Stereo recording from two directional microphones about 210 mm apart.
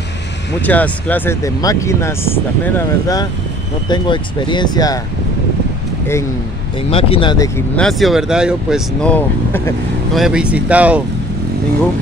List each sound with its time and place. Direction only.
0.6 s speech: 5° left (ahead or behind)
6.9 s speech: 25° left (ahead or behind); by 9.8 s 10° left (ahead or behind)
10.1 s speech: 5° right (ahead or behind)